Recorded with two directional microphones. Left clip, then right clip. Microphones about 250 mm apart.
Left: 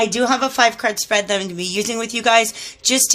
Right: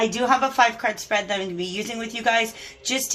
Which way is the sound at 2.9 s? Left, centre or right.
Left.